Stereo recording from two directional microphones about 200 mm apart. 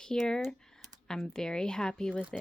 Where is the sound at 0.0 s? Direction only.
5° left (ahead or behind).